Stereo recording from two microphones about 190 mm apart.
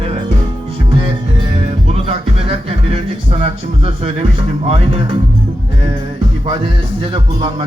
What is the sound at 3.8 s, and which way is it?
Speech, 30° right (ahead or behind).